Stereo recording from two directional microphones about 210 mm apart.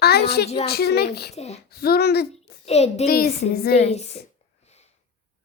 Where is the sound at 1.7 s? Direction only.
45° left (ahead or behind).